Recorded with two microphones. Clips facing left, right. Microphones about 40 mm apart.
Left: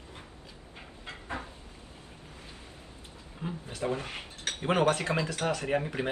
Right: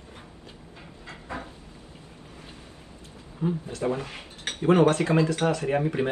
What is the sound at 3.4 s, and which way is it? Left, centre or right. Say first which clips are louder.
Speech: right 10 dB; left.